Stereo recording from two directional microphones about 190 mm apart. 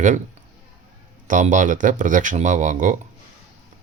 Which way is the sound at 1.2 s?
40° right (ahead or behind).